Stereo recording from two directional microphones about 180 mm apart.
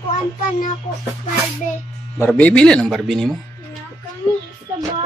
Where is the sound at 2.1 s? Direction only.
10° left (ahead or behind).